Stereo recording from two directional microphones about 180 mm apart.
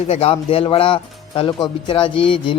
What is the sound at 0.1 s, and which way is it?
Speech, 35° left (ahead or behind).